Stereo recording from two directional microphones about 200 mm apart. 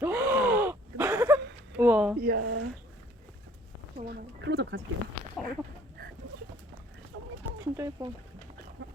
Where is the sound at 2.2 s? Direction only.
50° right (ahead or behind).